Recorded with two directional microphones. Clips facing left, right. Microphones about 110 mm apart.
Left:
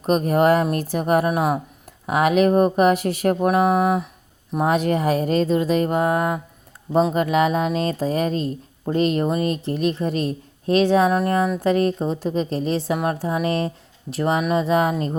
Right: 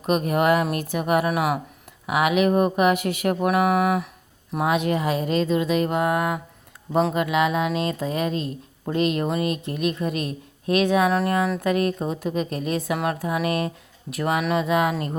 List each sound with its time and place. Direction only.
0.1 s speech: 35° left (ahead or behind)
4.6 s speech: 40° left (ahead or behind)
11.1 s speech: 20° left (ahead or behind)
11.6 s speech: 30° left (ahead or behind)